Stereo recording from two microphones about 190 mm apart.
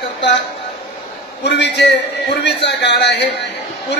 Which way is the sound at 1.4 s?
65° left (ahead or behind).